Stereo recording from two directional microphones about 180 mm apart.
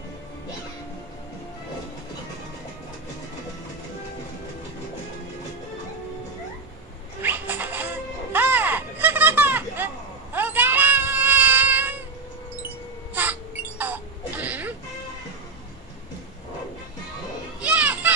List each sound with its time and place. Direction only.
7.2 s music: 10° right (ahead or behind)
10.3 s cat: 10° right (ahead or behind)
12.6 s wail: 10° right (ahead or behind)
17.6 s children playing: 5° right (ahead or behind)